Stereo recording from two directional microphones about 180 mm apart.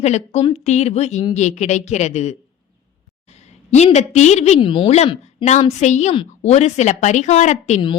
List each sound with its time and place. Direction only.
0.0 s a woman's voice: 35° left (ahead or behind)
3.2 s a sound: 40° left (ahead or behind)
3.9 s a woman's voice: 40° left (ahead or behind)